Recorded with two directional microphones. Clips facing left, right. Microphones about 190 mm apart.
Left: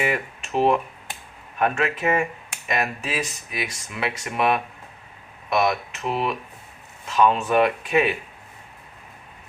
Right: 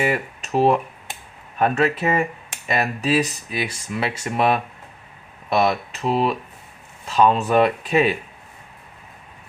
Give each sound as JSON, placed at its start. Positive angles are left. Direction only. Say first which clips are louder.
{"t": 0.0, "sound": "speech", "louder": "right 3 dB", "side_deg": -40}